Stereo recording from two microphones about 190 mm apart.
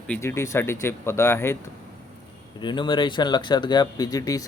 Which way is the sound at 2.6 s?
25° left (ahead or behind).